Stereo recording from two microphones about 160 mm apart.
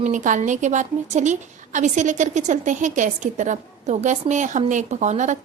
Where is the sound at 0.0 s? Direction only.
50° right (ahead or behind).